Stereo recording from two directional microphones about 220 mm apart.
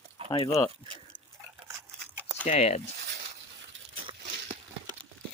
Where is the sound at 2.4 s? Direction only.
30° left (ahead or behind).